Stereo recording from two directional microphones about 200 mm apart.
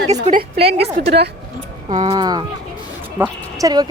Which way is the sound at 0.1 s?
40° right (ahead or behind).